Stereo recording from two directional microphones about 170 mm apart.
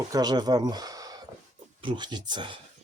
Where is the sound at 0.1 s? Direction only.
25° right (ahead or behind).